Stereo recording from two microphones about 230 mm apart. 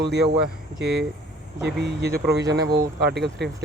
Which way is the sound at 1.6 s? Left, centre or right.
Right.